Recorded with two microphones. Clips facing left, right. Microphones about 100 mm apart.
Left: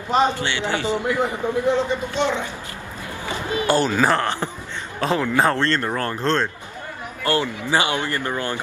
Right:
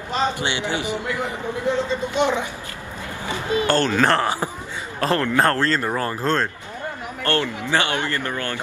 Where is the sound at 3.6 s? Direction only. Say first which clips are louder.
Left 1 dB; 10° left (ahead or behind).